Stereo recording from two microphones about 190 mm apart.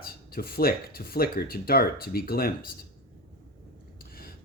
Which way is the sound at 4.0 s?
50° left (ahead or behind).